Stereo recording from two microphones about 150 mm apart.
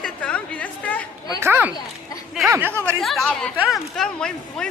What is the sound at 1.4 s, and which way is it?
A child's voice, 15° right (ahead or behind).